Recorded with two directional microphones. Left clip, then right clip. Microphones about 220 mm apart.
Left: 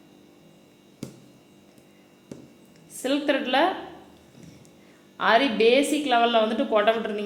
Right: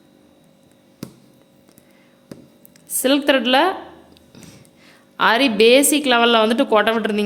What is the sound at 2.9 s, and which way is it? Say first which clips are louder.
Speech: right 8 dB; 40° right (ahead or behind).